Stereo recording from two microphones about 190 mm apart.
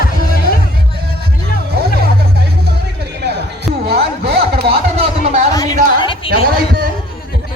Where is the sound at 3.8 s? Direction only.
55° right (ahead or behind).